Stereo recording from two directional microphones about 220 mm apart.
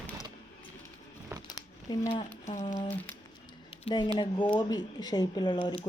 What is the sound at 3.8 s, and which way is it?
Speech, 20° left (ahead or behind).